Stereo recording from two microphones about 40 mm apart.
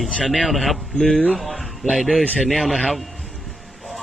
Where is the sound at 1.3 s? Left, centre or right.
Centre.